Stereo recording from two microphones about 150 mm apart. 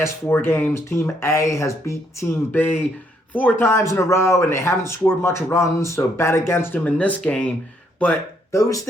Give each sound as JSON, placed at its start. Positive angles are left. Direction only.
{"t": 0.0, "sound": "speech", "side_deg": 15}